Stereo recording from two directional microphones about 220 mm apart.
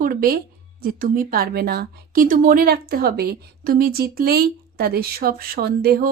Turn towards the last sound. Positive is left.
turn(degrees=-45)  # may be behind; listen again after turning